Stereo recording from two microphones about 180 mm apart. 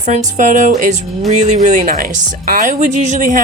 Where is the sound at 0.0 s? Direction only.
45° right (ahead or behind).